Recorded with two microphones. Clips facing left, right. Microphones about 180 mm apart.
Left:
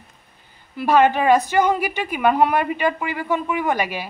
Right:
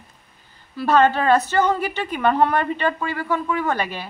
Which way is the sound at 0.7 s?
15° left (ahead or behind).